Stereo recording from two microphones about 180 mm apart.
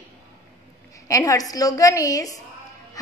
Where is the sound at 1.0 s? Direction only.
15° left (ahead or behind).